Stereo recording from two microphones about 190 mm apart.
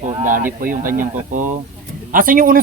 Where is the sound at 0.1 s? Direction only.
40° right (ahead or behind).